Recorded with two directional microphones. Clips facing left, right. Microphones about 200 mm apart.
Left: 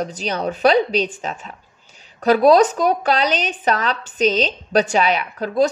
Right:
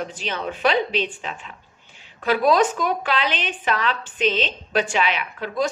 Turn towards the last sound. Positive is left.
turn(degrees=40)  # may be behind; listen again after turning